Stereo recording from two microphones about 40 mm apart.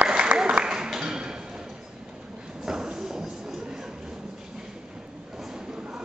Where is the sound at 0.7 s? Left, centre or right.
Centre.